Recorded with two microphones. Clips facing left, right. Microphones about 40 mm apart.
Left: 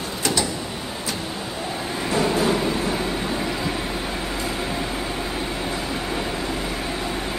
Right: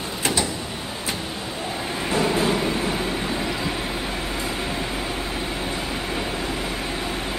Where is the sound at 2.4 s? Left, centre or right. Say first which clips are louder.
Left 1 dB; centre.